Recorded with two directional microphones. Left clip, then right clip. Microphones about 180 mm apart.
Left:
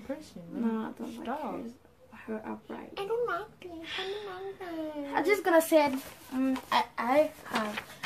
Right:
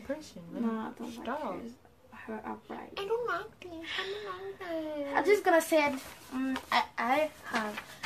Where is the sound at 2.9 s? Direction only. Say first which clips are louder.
Left 1 dB; 5° right (ahead or behind).